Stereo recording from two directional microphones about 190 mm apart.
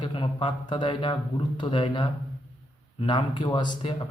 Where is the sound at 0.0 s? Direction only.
25° left (ahead or behind).